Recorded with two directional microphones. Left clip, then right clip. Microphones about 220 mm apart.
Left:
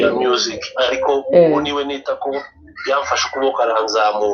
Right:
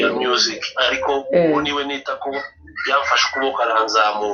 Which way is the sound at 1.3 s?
25° left (ahead or behind).